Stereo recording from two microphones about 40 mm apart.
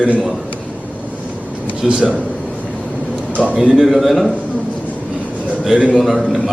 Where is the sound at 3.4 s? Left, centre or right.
Centre.